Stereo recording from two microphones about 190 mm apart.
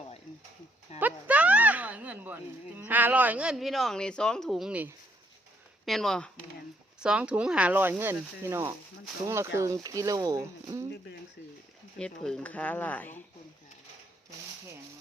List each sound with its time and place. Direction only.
0.9 s speech: 10° right (ahead or behind)
11.9 s speech: 5° left (ahead or behind)